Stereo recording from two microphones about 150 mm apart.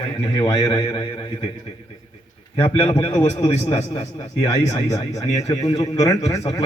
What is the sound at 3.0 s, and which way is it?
Speech, 25° left (ahead or behind).